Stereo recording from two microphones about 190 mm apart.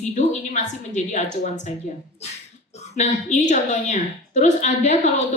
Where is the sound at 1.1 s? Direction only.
40° left (ahead or behind).